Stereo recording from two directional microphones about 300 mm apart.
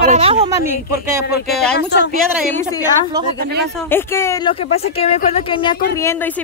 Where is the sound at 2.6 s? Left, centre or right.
Centre.